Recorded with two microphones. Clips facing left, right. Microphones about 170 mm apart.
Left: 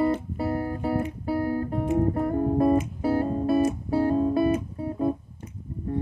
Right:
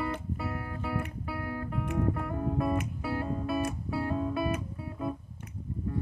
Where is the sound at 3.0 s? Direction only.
35° left (ahead or behind).